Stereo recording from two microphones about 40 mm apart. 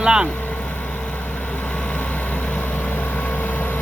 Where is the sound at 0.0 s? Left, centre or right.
Centre.